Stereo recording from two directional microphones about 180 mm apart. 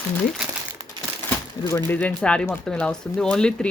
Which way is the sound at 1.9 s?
10° left (ahead or behind).